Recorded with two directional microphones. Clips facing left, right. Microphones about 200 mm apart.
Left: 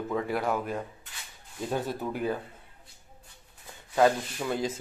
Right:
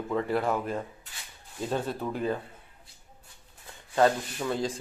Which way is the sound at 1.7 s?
15° left (ahead or behind).